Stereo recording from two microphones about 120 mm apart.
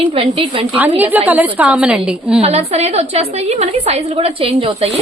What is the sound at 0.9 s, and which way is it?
A woman's voice, 15° right (ahead or behind).